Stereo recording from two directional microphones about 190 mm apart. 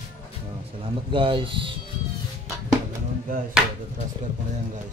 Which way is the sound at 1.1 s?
25° right (ahead or behind).